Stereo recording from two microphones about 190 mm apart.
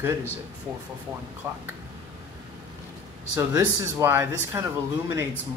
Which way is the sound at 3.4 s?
15° right (ahead or behind).